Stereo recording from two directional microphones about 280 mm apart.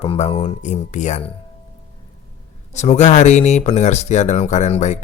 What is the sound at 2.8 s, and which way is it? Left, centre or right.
Speech, left.